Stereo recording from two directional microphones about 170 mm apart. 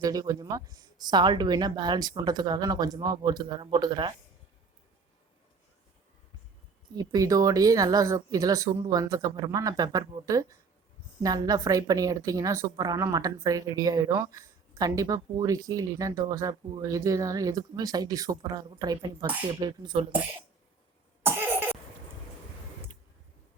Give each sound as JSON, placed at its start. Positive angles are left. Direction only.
{"t": 0.0, "sound": "speech", "side_deg": -20}
{"t": 6.9, "sound": "speech", "side_deg": -25}
{"t": 21.2, "sound": "cough", "side_deg": -10}